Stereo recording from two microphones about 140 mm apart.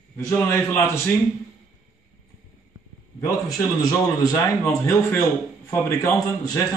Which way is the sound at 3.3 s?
25° left (ahead or behind).